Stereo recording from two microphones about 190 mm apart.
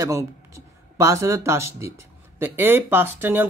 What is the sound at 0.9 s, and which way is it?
Speech, 15° right (ahead or behind).